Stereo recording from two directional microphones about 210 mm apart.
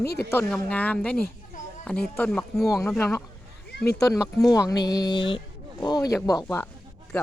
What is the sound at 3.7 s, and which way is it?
Speech, 50° left (ahead or behind).